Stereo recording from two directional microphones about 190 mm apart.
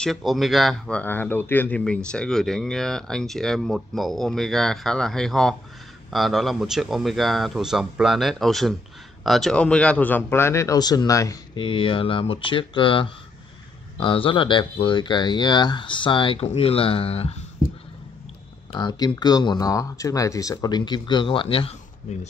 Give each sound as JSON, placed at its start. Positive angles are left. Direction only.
{"t": 0.0, "sound": "speech", "side_deg": 0}
{"t": 18.7, "sound": "speech", "side_deg": 25}